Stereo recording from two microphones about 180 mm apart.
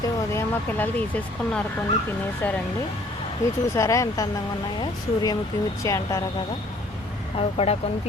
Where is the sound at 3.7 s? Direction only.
15° left (ahead or behind).